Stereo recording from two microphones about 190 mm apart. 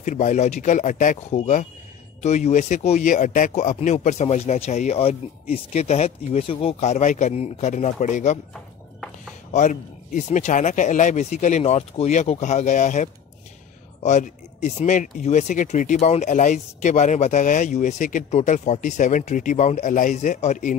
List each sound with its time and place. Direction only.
0.0 s speech: 40° left (ahead or behind)
9.5 s speech: 40° left (ahead or behind)